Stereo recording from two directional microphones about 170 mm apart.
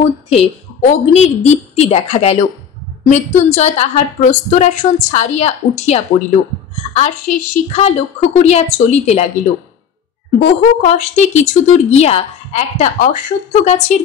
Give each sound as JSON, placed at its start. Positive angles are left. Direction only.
{"t": 0.3, "sound": "a woman's voice", "side_deg": 40}
{"t": 10.8, "sound": "a woman's voice", "side_deg": 40}